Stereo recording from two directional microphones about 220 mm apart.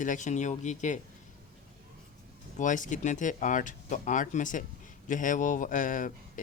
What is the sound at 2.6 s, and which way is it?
A man's voice, 35° left (ahead or behind).